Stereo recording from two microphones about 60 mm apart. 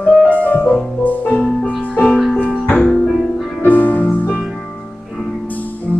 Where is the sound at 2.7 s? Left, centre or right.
Centre.